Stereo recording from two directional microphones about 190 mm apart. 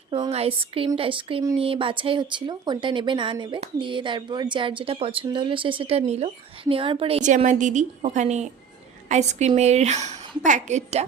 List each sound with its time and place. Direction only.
0.1 s a woman's voice: 30° right (ahead or behind)